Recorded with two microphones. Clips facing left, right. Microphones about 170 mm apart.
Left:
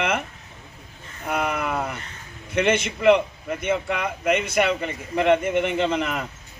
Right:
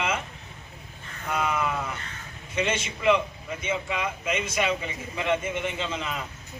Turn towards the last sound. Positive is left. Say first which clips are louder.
# left 8 dB
turn(degrees=60)  # may be behind; listen again after turning